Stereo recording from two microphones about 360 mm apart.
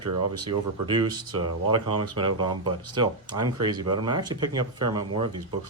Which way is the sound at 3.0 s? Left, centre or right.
Centre.